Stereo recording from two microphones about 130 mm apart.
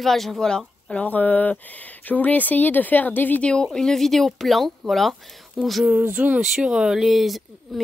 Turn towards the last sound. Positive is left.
turn(degrees=0)  # may be behind; listen again after turning